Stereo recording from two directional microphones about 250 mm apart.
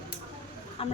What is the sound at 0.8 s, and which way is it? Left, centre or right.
Speech, left.